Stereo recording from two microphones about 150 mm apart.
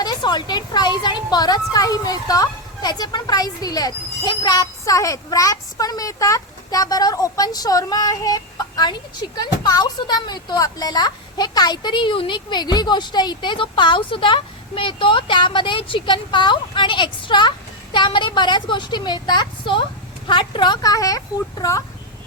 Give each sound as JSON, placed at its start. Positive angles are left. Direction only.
{"t": 0.0, "sound": "a woman's voice", "side_deg": 30}